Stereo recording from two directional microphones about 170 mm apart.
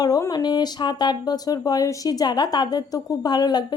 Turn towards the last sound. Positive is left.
turn(degrees=25)  # may be behind; listen again after turning